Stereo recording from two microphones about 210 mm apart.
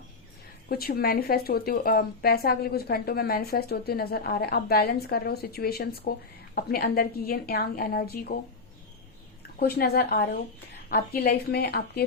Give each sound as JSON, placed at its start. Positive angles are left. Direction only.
{"t": 0.7, "sound": "speech", "side_deg": 45}
{"t": 9.6, "sound": "speech", "side_deg": 50}